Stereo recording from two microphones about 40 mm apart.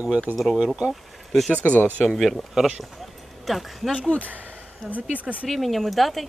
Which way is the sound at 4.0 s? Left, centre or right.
Left.